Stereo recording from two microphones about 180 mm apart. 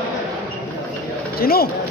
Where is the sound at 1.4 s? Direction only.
55° left (ahead or behind).